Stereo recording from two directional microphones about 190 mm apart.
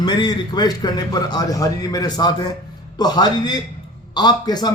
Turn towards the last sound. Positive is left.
turn(degrees=20)  # may be behind; listen again after turning